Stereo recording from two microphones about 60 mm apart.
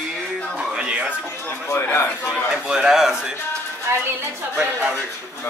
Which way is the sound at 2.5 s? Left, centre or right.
Centre.